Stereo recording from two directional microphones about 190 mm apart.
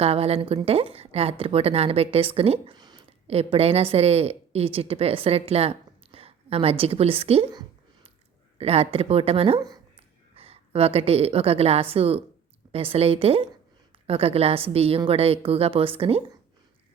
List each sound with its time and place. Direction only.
0.0 s a woman's voice: 30° right (ahead or behind)
10.3 s a woman's voice: 30° right (ahead or behind)